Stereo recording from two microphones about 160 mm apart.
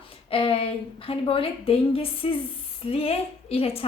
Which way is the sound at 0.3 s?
35° left (ahead or behind).